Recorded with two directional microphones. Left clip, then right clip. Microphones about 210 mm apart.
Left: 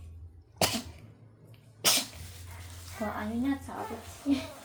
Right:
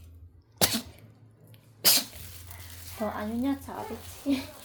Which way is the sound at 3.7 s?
35° right (ahead or behind).